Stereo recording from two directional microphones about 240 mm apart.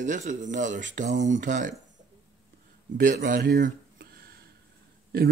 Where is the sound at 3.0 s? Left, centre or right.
Right.